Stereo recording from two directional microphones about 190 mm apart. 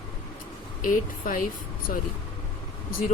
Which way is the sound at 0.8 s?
45° left (ahead or behind).